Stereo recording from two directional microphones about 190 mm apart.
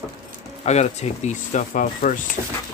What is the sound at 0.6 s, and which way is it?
Speech, 35° left (ahead or behind).